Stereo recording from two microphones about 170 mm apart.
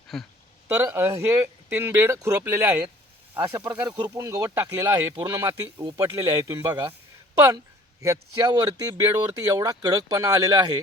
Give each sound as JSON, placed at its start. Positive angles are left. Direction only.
{"t": 0.1, "sound": "speech", "side_deg": 0}
{"t": 0.8, "sound": "speech", "side_deg": -15}
{"t": 8.0, "sound": "speech", "side_deg": -20}